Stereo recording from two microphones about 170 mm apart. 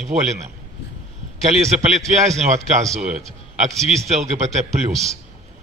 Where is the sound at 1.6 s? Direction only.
40° right (ahead or behind).